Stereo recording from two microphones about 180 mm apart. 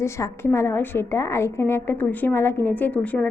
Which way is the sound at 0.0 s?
15° left (ahead or behind).